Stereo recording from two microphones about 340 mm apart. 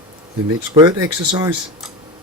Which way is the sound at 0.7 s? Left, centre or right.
Centre.